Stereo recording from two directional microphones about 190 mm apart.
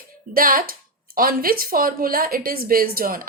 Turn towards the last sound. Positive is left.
turn(degrees=-50)  # may be behind; listen again after turning